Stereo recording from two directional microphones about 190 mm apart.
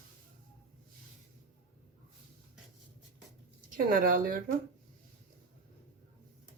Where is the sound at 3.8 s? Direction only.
45° right (ahead or behind).